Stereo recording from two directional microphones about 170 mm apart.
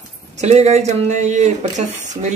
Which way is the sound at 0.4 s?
40° right (ahead or behind).